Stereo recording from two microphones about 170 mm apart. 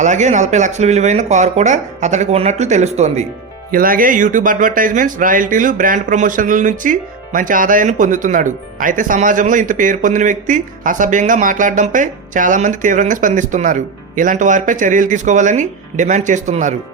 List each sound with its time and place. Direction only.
0.0 s speech: 45° right (ahead or behind)
3.7 s speech: 55° right (ahead or behind)